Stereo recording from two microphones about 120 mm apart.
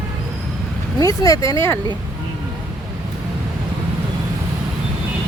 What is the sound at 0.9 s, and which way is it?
Speech, 30° left (ahead or behind).